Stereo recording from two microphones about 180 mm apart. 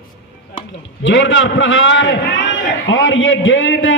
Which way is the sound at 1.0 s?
90° left.